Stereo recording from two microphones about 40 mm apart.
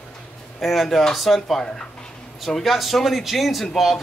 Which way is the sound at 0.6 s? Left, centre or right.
Centre.